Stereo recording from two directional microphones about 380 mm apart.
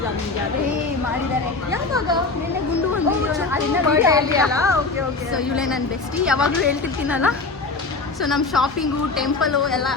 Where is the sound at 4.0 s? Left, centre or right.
Centre.